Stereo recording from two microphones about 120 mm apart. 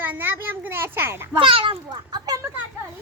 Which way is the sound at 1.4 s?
45° right (ahead or behind).